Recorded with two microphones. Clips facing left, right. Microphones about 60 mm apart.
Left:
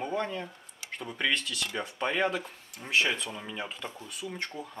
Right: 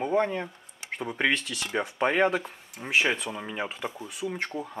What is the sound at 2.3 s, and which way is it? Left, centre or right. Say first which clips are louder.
Speech: right 4 dB; centre.